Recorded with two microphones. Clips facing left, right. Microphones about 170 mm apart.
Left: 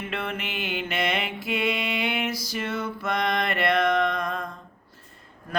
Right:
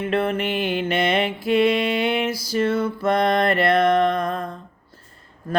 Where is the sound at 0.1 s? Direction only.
35° right (ahead or behind).